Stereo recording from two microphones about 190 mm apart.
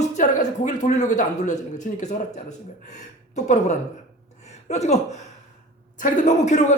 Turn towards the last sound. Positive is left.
turn(degrees=35)  # may be behind; listen again after turning